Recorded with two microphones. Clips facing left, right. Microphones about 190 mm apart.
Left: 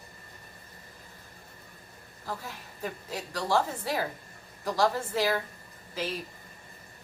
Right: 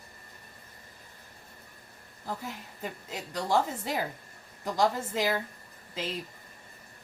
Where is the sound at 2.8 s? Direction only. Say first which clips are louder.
Left 3 dB; 20° right (ahead or behind).